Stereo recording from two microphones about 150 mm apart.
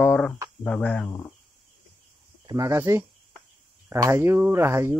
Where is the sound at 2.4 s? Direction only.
20° right (ahead or behind).